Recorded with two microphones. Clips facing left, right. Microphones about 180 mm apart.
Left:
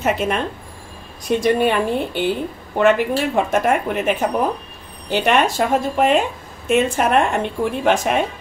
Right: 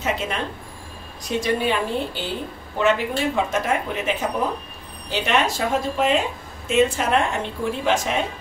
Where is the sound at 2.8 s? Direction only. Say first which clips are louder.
Left 5 dB; 55° left (ahead or behind).